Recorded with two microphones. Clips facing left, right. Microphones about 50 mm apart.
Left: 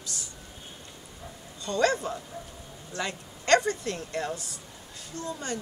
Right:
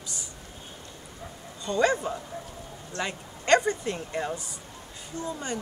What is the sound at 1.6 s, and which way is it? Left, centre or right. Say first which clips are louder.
Speech: right 1 dB; centre.